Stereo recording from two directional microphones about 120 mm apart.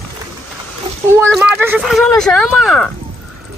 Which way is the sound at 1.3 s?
5° right (ahead or behind).